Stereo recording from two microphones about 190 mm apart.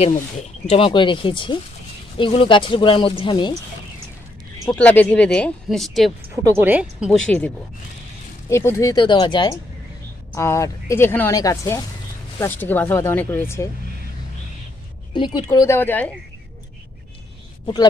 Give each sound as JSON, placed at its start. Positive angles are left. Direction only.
{"t": 0.0, "sound": "speech", "side_deg": 35}
{"t": 4.7, "sound": "speech", "side_deg": 10}
{"t": 6.4, "sound": "speech", "side_deg": -10}
{"t": 10.3, "sound": "speech", "side_deg": 15}
{"t": 15.1, "sound": "speech", "side_deg": 25}